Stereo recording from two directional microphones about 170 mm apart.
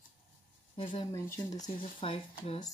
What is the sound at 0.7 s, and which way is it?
Speech, 30° left (ahead or behind).